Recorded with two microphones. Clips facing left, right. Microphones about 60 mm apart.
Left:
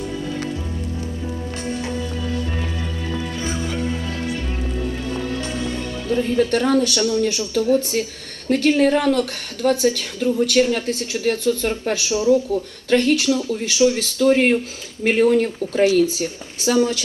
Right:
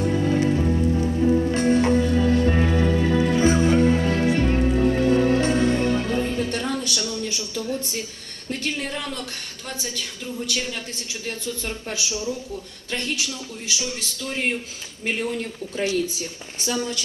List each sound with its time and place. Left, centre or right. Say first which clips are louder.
0.0 s music: right 5 dB; right
1.5 s music: right 7 dB; right
6.3 s a woman's voice: left 8 dB; left